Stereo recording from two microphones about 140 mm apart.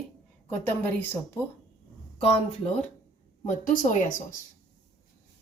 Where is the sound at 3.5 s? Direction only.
70° left (ahead or behind).